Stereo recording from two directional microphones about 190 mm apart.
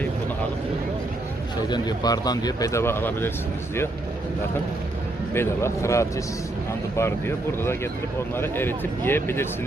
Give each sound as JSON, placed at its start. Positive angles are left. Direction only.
{"t": 1.7, "sound": "speech", "side_deg": 20}
{"t": 5.3, "sound": "speech", "side_deg": 15}